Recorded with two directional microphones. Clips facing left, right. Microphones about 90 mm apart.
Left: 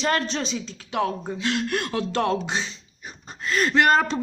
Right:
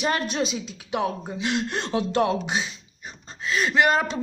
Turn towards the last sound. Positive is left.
turn(degrees=-5)  # may be behind; listen again after turning